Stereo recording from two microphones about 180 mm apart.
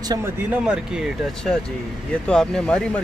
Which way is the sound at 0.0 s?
15° right (ahead or behind).